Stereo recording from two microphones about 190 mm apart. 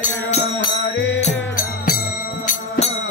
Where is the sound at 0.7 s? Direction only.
65° left (ahead or behind).